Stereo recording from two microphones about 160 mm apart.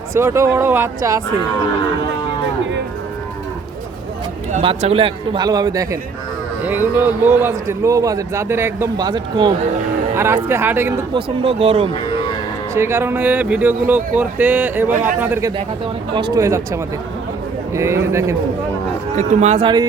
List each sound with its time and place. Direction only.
0.1 s a man's voice: 15° right (ahead or behind)
4.6 s a man's voice: 35° right (ahead or behind); by 6.0 s 20° right (ahead or behind)
6.7 s a man's voice: 10° right (ahead or behind)
9.0 s a man's voice: 25° right (ahead or behind)
10.2 s a man's voice: 15° right (ahead or behind)
11.1 s speech: 35° right (ahead or behind)
12.7 s a man's voice: 15° right (ahead or behind)
16.1 s a man's voice: 25° right (ahead or behind)
19.1 s speech: 45° right (ahead or behind)